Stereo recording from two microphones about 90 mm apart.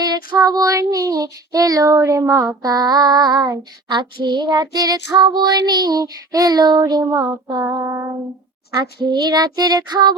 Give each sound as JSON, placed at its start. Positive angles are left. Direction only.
{"t": 0.0, "sound": "child singing", "side_deg": -50}
{"t": 7.7, "sound": "child singing", "side_deg": -30}
{"t": 8.8, "sound": "child singing", "side_deg": -50}